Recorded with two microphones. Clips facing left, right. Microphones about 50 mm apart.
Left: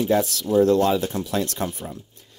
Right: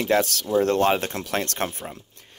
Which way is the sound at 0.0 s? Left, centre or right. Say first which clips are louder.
Left 1 dB; right.